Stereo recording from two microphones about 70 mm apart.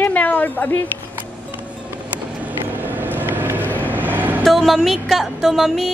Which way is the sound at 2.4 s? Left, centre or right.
Right.